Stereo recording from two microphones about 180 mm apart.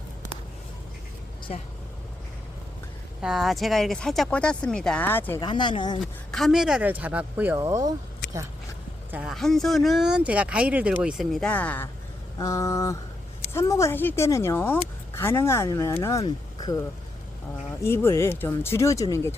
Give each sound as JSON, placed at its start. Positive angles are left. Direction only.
{"t": 1.5, "sound": "speech", "side_deg": 40}
{"t": 3.2, "sound": "speech", "side_deg": -5}
{"t": 5.4, "sound": "speech", "side_deg": 25}
{"t": 6.0, "sound": "speech", "side_deg": 0}
{"t": 9.1, "sound": "speech", "side_deg": 0}
{"t": 12.4, "sound": "speech", "side_deg": 20}